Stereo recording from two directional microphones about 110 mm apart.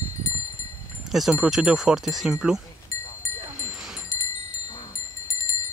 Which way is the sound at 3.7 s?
5° right (ahead or behind).